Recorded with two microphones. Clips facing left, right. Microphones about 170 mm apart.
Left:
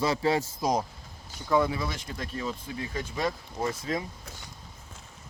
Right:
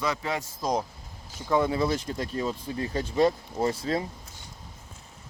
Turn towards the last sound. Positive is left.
turn(degrees=-30)  # may be behind; listen again after turning